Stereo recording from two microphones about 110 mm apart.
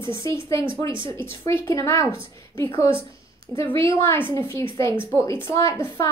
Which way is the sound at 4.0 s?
20° left (ahead or behind).